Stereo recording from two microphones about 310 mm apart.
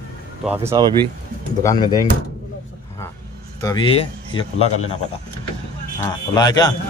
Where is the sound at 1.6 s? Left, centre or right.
Centre.